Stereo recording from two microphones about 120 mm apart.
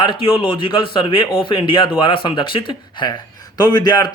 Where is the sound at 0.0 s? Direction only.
45° left (ahead or behind).